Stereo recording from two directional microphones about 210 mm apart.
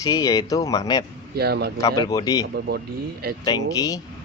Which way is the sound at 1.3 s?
50° right (ahead or behind).